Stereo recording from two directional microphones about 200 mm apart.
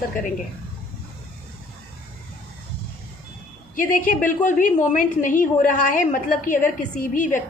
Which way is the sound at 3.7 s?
45° left (ahead or behind).